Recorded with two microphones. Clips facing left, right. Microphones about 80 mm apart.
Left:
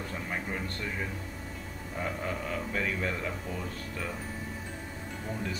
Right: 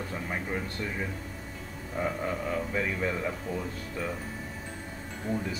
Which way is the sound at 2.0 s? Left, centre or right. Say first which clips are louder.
Right 3 dB; centre.